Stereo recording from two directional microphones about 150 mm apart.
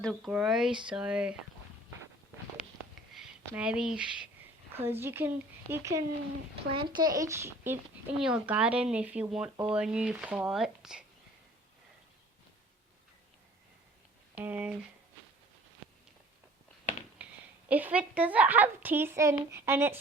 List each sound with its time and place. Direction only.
0.0 s speech: centre (ahead or behind)
3.1 s a woman's voice: 5° right (ahead or behind)
6.7 s a woman's voice: 35° right (ahead or behind); by 7.8 s 15° right (ahead or behind)
8.2 s a woman's voice: 5° right (ahead or behind)
14.3 s a woman's voice: 10° right (ahead or behind)
17.7 s a woman's voice: 10° right (ahead or behind)